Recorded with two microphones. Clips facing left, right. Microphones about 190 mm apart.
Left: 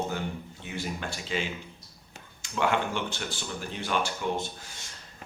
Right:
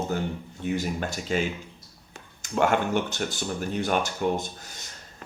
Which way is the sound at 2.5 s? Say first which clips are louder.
Right 5 dB; 45° right (ahead or behind).